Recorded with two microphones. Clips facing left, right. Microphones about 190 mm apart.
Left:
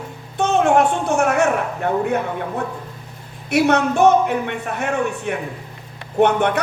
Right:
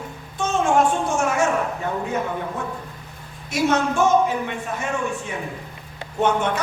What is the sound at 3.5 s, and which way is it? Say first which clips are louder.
A woman's voice: left 4 dB; 65° left (ahead or behind).